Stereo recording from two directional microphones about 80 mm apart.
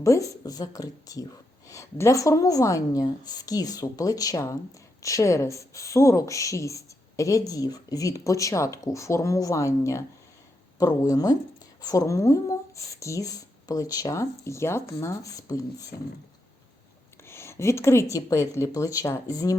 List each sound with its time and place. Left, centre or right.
0.0 s speech: left
17.2 s speech: left